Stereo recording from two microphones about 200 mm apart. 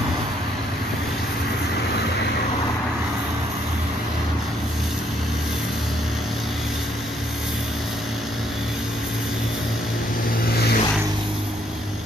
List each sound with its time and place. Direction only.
10.5 s vehicle: 50° left (ahead or behind)